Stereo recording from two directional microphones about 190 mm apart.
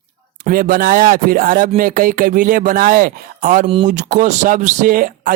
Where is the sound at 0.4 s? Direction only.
45° right (ahead or behind).